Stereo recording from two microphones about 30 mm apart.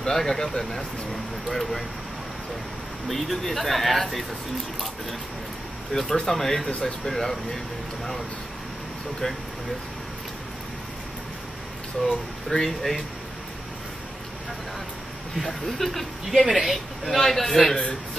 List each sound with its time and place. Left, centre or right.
0.0 s a man's voice: centre
3.1 s a man's voice: centre
5.9 s speech: left
6.3 s speech: centre
12.0 s speech: centre
15.4 s speech: centre
16.3 s a man's voice: centre